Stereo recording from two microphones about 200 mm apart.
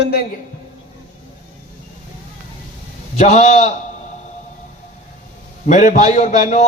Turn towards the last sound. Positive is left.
turn(degrees=40)  # may be behind; listen again after turning